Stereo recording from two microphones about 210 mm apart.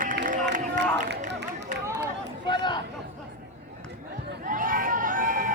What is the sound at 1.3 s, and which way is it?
Run, 55° right (ahead or behind).